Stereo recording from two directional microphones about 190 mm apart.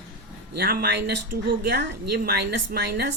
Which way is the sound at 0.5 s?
55° right (ahead or behind).